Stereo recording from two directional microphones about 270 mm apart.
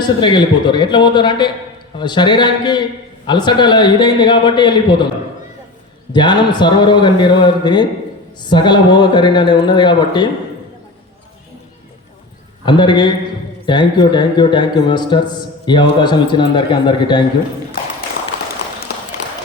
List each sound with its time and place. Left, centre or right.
0.2 s a man's voice: centre
6.1 s a man's voice: centre
12.6 s a man's voice: centre